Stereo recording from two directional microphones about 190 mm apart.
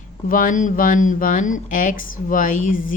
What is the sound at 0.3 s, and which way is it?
Speech, 45° left (ahead or behind).